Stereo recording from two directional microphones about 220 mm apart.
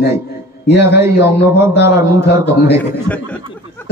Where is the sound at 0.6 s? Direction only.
50° left (ahead or behind).